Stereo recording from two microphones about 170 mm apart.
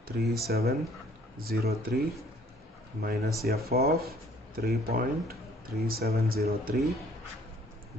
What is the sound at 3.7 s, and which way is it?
Speech, 65° right (ahead or behind).